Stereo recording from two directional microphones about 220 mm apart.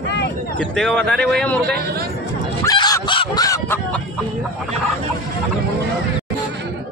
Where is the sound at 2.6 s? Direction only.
15° left (ahead or behind).